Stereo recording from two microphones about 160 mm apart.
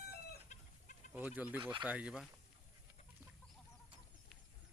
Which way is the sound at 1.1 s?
10° right (ahead or behind).